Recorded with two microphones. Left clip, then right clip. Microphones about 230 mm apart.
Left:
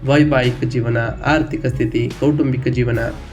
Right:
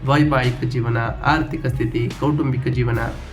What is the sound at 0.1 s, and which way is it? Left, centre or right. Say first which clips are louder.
Speech: left 3 dB; centre.